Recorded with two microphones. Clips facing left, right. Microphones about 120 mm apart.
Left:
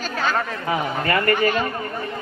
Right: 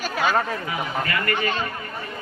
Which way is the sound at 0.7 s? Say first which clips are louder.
Left 5 dB; 35° left (ahead or behind).